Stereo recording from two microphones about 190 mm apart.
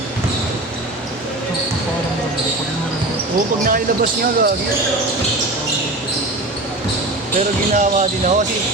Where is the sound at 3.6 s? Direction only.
50° right (ahead or behind).